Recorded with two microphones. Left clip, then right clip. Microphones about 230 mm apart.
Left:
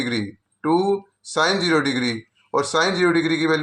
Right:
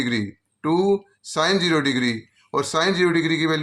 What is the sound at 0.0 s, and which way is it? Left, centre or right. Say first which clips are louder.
Speech: even; right.